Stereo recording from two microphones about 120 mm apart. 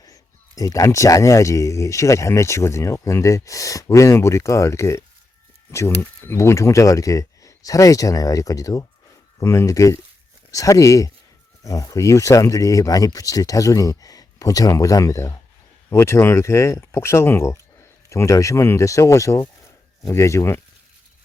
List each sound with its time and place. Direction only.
0.0 s speech: 30° left (ahead or behind)